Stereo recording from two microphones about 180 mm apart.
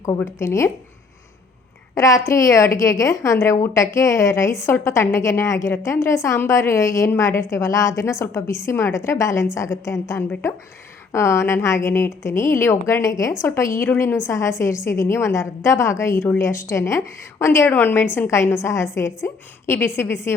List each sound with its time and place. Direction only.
0.0 s a woman's voice: 15° left (ahead or behind)
2.0 s a woman's voice: 20° left (ahead or behind)